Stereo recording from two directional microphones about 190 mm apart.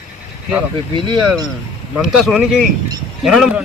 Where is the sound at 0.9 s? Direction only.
25° right (ahead or behind).